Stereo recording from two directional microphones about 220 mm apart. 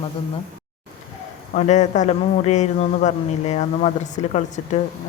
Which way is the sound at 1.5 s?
30° left (ahead or behind).